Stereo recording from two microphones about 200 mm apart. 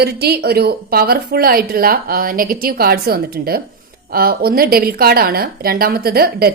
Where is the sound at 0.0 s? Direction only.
50° right (ahead or behind).